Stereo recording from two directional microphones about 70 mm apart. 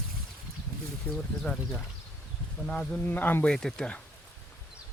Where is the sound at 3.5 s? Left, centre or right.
Centre.